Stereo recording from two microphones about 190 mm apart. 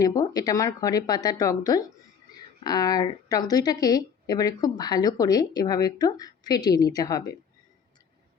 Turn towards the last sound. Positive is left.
turn(degrees=20)  # may be behind; listen again after turning